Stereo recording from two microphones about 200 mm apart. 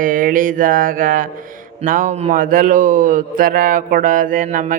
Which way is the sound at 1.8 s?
40° right (ahead or behind).